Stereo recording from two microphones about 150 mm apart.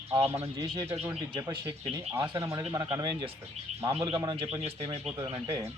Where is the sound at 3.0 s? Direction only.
30° right (ahead or behind).